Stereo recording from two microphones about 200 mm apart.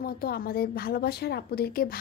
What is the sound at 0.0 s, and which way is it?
A woman's voice, 50° left (ahead or behind).